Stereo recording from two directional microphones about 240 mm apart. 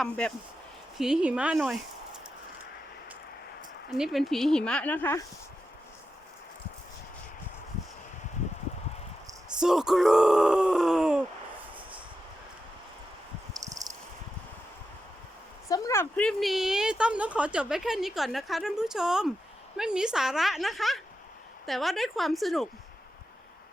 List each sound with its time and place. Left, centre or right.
0.0 s a woman's voice: centre
3.9 s a woman's voice: centre
9.6 s a woman's voice: centre
13.5 s cricket: centre
15.7 s a woman's voice: centre